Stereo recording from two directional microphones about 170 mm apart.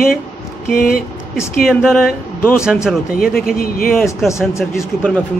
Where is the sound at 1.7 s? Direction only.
Centre (ahead or behind).